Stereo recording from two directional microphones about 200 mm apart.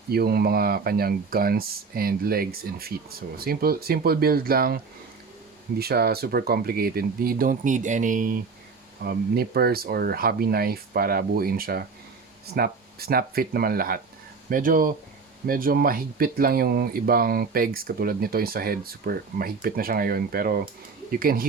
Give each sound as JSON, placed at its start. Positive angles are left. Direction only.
{"t": 0.1, "sound": "speech", "side_deg": -50}
{"t": 5.8, "sound": "speech", "side_deg": -50}